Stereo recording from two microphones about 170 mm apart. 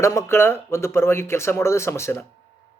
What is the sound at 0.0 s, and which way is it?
A man's voice, 15° left (ahead or behind).